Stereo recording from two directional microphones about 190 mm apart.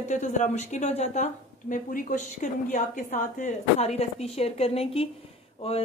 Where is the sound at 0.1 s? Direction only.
40° left (ahead or behind).